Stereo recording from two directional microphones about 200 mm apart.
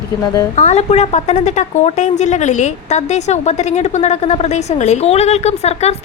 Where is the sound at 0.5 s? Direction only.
35° left (ahead or behind).